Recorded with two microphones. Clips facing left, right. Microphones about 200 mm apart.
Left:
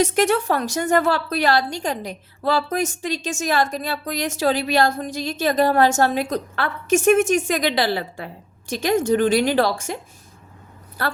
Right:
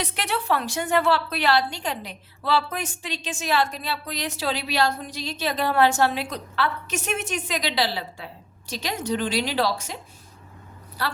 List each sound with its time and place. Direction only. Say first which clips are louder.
0.0 s a woman's voice: left 11 dB; 45° left (ahead or behind)
11.0 s a woman's voice: left 4 dB; 50° left (ahead or behind)